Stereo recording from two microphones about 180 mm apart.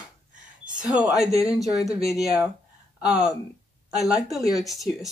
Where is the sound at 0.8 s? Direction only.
5° right (ahead or behind).